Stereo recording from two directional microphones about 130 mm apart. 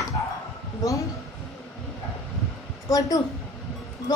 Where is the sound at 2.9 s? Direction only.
30° left (ahead or behind).